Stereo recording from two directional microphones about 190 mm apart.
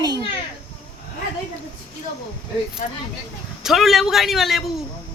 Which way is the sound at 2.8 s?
45° left (ahead or behind).